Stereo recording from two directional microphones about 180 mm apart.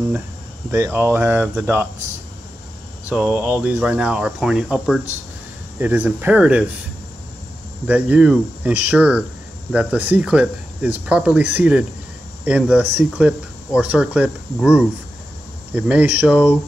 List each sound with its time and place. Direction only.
0.7 s speech: 15° right (ahead or behind)
3.1 s speech: 10° right (ahead or behind)
7.8 s speech: 10° right (ahead or behind)